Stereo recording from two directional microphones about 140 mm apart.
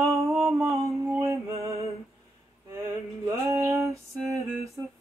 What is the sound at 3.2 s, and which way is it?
Music, 20° right (ahead or behind).